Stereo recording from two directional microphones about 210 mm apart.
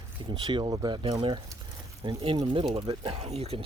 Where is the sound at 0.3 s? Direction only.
20° right (ahead or behind).